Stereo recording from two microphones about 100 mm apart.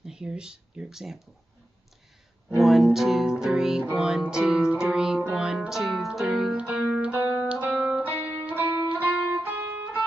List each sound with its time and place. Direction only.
0.0 s speech: 5° right (ahead or behind)
2.5 s music: centre (ahead or behind)
7.1 s music: 15° right (ahead or behind)